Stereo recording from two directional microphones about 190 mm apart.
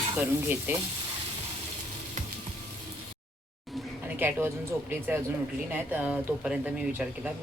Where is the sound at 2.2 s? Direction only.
40° right (ahead or behind).